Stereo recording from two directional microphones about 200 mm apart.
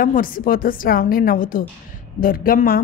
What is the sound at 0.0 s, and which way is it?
A woman's voice, 45° left (ahead or behind).